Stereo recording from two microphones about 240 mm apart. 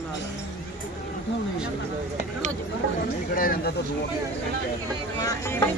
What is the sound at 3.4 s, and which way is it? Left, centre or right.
Speech, left.